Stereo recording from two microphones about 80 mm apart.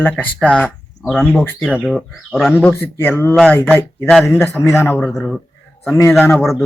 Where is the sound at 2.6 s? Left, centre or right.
Left.